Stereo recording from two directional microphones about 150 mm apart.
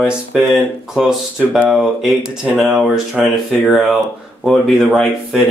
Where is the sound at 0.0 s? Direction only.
5° right (ahead or behind).